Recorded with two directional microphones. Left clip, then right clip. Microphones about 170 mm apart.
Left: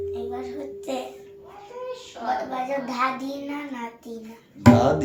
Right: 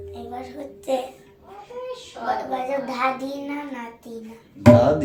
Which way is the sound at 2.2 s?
25° right (ahead or behind).